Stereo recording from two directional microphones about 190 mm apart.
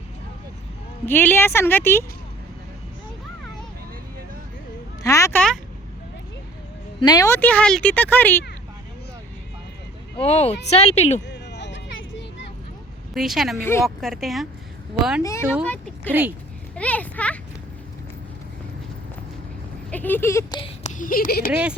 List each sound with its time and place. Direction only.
1.0 s speech: 10° left (ahead or behind)
5.0 s a sound: 15° left (ahead or behind)
7.0 s speech: 20° left (ahead or behind)
10.2 s speech: 35° left (ahead or behind)
11.3 s a sound: 65° left (ahead or behind)
13.1 s speech: centre (ahead or behind)
13.6 s speech: 15° left (ahead or behind)
13.8 s speech: centre (ahead or behind)
15.2 s a child's voice: 15° left (ahead or behind)
19.9 s speech: 10° left (ahead or behind)
21.0 s speech: 45° left (ahead or behind)
21.5 s speech: 5° right (ahead or behind)